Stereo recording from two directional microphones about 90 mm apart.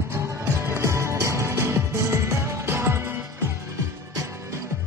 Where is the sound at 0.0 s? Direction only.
30° right (ahead or behind).